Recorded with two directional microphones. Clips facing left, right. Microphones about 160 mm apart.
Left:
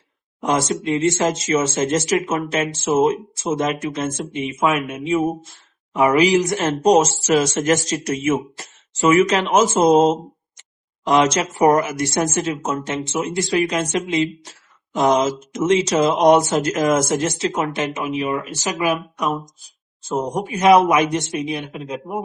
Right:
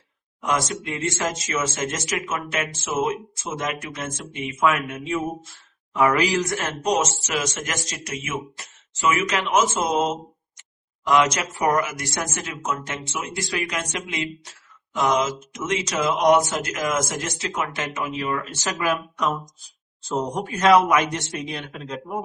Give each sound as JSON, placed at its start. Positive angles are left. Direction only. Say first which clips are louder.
{"t": 0.4, "sound": "a man's voice", "louder": "left 5 dB", "side_deg": 30}